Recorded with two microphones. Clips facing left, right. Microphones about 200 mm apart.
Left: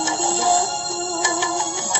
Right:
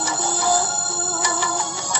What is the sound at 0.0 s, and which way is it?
Music, 25° left (ahead or behind).